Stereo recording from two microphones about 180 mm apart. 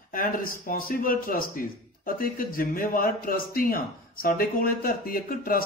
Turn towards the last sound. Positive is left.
turn(degrees=55)  # may be behind; listen again after turning